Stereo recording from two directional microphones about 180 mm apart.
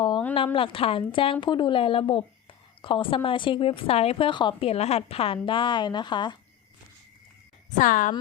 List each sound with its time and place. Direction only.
0.3 s a woman's voice: 30° left (ahead or behind)
7.8 s a woman's voice: 45° left (ahead or behind)